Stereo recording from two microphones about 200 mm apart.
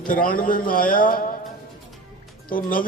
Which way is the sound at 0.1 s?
45° left (ahead or behind).